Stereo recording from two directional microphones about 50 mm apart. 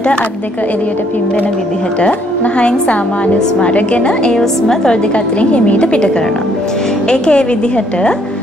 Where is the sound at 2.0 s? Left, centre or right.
Left.